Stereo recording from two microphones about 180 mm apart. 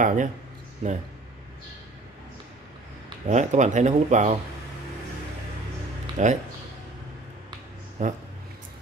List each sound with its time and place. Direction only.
0.0 s speech: 45° right (ahead or behind)
3.3 s speech: 40° right (ahead or behind)
6.2 s speech: 40° right (ahead or behind)
8.0 s speech: 40° right (ahead or behind)